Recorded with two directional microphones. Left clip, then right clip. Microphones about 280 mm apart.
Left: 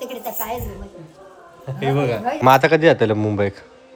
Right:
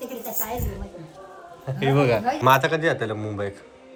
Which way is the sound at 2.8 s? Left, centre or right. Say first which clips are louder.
Left 9 dB; left.